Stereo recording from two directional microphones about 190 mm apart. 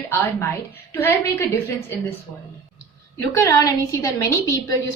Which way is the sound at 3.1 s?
15° left (ahead or behind).